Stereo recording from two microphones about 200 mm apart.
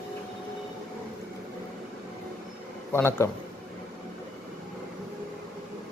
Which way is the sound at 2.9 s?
10° left (ahead or behind).